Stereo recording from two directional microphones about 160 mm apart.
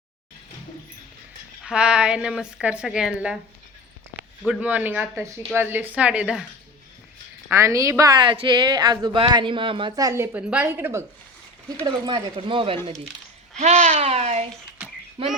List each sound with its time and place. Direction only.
1.6 s a woman's voice: 5° right (ahead or behind)
4.4 s speech: 10° right (ahead or behind)
7.5 s speech: 20° right (ahead or behind)
10.3 s speech: 10° right (ahead or behind)
11.8 s a child's voice: 30° right (ahead or behind)
14.8 s a sound: 10° right (ahead or behind)
15.2 s speech: 35° right (ahead or behind)